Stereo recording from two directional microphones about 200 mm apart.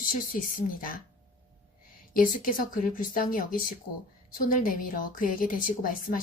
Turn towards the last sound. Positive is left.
turn(degrees=45)  # may be behind; listen again after turning